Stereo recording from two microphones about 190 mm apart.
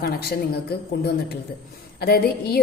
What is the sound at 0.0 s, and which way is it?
A woman's voice, 55° left (ahead or behind).